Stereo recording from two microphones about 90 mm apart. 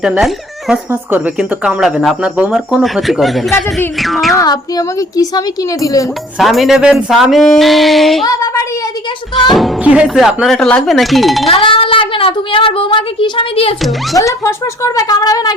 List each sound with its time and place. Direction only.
0.2 s speech: centre (ahead or behind)
0.9 s speech: 20° right (ahead or behind); by 3.5 s centre (ahead or behind)
3.9 s a sound: centre (ahead or behind)
4.4 s speech: 45° left (ahead or behind)
6.4 s speech: centre (ahead or behind)
9.3 s speech: centre (ahead or behind)
9.8 s speech: 15° right (ahead or behind)
10.2 s speech: 5° right (ahead or behind)
11.4 s a woman's voice: 85° left
14.2 s speech: 35° left (ahead or behind)